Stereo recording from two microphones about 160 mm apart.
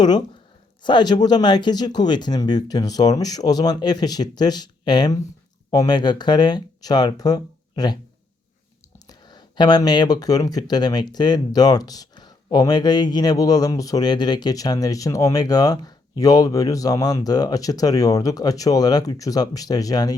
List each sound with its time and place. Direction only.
0.8 s speech: 30° left (ahead or behind)
9.0 s speech: 25° left (ahead or behind)